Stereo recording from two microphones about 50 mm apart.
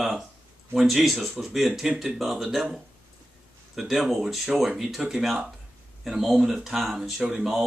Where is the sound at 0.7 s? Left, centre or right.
Centre.